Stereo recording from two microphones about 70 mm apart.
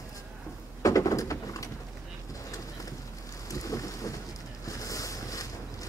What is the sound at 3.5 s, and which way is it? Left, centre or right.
Rain, left.